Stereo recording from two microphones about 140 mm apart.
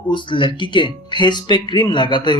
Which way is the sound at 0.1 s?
35° left (ahead or behind).